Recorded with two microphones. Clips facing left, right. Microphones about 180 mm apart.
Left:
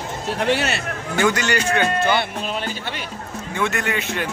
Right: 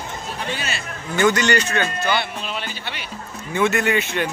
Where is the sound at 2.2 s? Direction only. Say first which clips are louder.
Left 3 dB; 45° left (ahead or behind).